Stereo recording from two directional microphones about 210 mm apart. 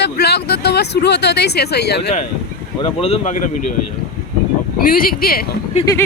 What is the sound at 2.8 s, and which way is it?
Speech, 30° left (ahead or behind).